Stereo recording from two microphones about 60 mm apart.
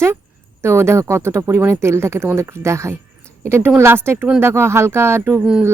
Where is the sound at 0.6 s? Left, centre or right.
Right.